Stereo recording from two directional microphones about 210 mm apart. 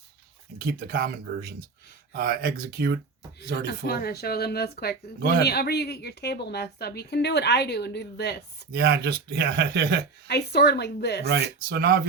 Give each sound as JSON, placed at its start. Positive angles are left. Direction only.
{"t": 0.6, "sound": "speech", "side_deg": -45}
{"t": 3.7, "sound": "a woman's voice", "side_deg": 50}
{"t": 8.7, "sound": "speech", "side_deg": -50}
{"t": 10.2, "sound": "a woman's voice", "side_deg": 50}
{"t": 11.3, "sound": "speech", "side_deg": -50}